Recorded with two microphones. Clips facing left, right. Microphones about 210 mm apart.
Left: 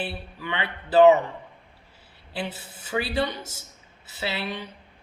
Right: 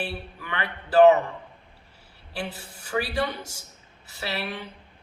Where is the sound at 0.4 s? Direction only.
25° left (ahead or behind).